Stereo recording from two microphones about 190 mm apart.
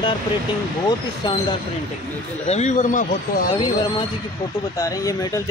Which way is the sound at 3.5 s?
25° left (ahead or behind).